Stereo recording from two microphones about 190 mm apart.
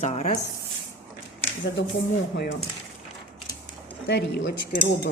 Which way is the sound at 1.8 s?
70° left (ahead or behind).